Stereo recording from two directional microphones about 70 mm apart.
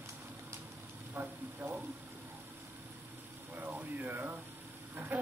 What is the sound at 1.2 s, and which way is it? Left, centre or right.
Speech, right.